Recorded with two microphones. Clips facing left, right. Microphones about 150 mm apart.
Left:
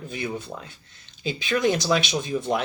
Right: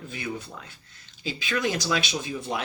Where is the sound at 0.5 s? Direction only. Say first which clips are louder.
Left 6 dB; 45° left (ahead or behind).